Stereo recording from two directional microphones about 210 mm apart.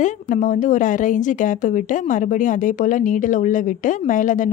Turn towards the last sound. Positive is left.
turn(degrees=40)  # may be behind; listen again after turning